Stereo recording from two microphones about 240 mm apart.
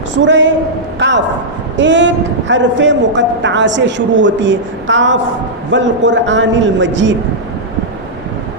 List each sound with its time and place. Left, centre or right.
0.2 s a man's voice: right